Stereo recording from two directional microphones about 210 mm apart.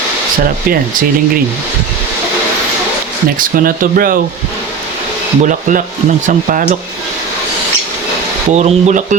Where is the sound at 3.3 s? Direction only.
40° right (ahead or behind).